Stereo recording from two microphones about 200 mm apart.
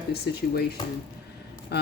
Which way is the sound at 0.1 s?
50° left (ahead or behind).